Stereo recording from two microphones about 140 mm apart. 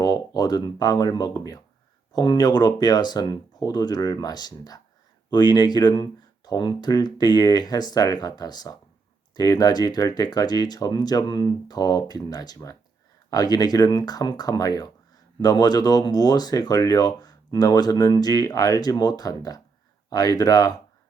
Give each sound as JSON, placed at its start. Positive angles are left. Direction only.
{"t": 0.0, "sound": "speech", "side_deg": 30}